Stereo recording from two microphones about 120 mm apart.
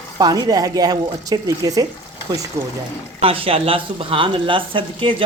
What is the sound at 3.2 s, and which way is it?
Speech, 50° right (ahead or behind).